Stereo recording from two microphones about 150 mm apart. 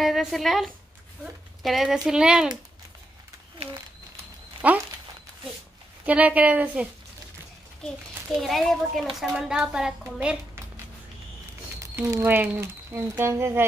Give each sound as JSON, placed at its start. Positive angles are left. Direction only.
{"t": 0.0, "sound": "a woman's voice", "side_deg": 0}
{"t": 4.6, "sound": "speech", "side_deg": -10}
{"t": 6.0, "sound": "a woman's voice", "side_deg": -10}
{"t": 8.4, "sound": "a woman's voice", "side_deg": 0}
{"t": 11.8, "sound": "speech", "side_deg": -20}